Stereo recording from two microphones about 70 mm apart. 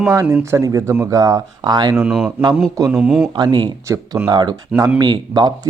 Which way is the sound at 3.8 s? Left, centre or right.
Right.